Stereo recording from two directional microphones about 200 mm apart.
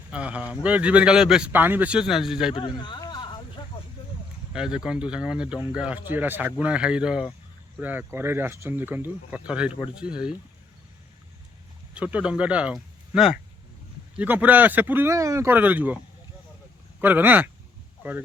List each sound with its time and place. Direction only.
0.1 s speech: 5° right (ahead or behind)
2.6 s a sound: 25° left (ahead or behind)
4.5 s speech: 5° right (ahead or behind)
11.9 s speech: 5° right (ahead or behind)
17.0 s speech: 10° right (ahead or behind)